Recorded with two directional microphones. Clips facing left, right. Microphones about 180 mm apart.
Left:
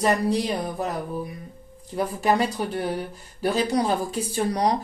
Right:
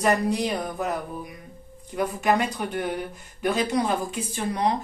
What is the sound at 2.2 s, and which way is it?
Speech, 35° left (ahead or behind).